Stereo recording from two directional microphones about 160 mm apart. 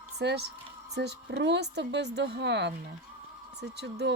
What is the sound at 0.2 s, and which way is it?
A woman's voice, 90° right.